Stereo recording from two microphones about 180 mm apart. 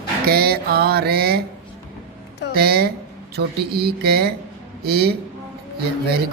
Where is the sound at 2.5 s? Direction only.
60° right (ahead or behind).